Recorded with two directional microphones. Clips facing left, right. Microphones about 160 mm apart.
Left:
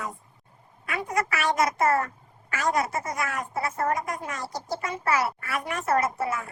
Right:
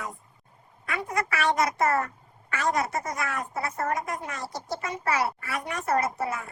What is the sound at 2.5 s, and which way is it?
Speech, 25° right (ahead or behind).